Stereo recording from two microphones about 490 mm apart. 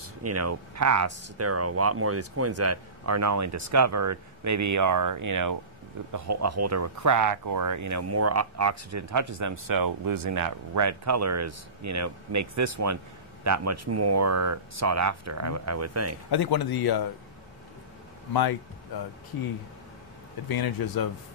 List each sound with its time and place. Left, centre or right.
0.0 s speech: right
16.3 s speech: left
20.4 s speech: left